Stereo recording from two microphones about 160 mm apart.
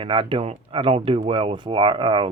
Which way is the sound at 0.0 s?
35° right (ahead or behind).